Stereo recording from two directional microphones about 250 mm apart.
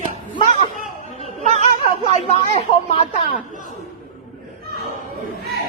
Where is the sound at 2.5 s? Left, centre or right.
Left.